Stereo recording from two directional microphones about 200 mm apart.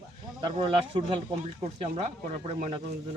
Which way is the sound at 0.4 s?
25° right (ahead or behind).